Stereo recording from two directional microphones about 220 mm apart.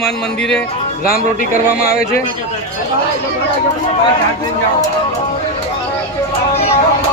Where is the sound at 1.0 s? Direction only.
40° left (ahead or behind).